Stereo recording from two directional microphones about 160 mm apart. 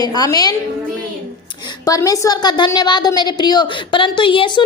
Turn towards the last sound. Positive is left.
turn(degrees=30)  # may be behind; listen again after turning